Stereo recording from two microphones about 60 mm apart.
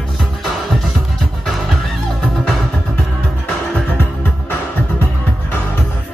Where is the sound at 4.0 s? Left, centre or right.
Left.